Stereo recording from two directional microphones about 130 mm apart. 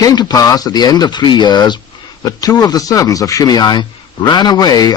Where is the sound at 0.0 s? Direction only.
30° left (ahead or behind).